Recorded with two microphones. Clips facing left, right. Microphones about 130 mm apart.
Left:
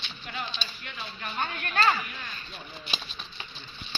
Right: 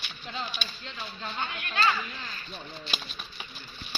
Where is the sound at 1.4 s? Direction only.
45° left (ahead or behind).